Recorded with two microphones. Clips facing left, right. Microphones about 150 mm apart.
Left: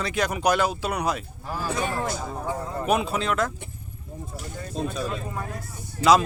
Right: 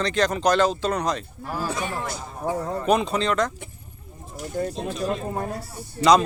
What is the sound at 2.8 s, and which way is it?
Speech, 5° left (ahead or behind).